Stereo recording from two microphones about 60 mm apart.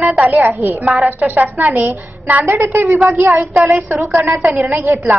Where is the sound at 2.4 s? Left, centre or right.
Right.